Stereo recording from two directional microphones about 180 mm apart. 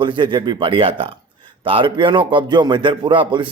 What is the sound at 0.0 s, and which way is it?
Speech, 25° right (ahead or behind).